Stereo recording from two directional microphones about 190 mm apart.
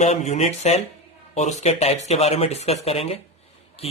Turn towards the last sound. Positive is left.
turn(degrees=30)  # may be behind; listen again after turning